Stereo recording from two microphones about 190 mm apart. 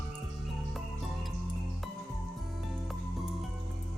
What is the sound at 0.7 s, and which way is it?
Music, centre (ahead or behind).